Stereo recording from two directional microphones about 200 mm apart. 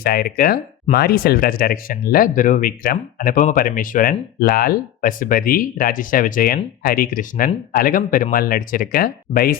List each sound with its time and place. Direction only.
0.0 s speech: 50° left (ahead or behind)